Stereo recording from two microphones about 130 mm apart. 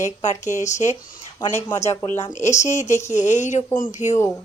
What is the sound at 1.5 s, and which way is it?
Speech, 20° left (ahead or behind).